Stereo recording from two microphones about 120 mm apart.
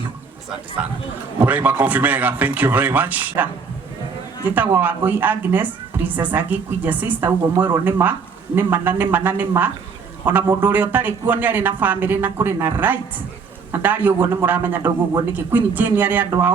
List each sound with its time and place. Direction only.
0.8 s a woman's voice: 10° right (ahead or behind)
4.5 s a woman's voice: 15° right (ahead or behind)